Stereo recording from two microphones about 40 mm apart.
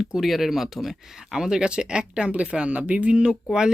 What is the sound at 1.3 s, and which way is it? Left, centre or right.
Speech, centre.